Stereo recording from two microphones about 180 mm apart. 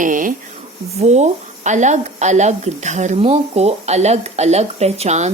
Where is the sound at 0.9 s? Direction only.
40° right (ahead or behind).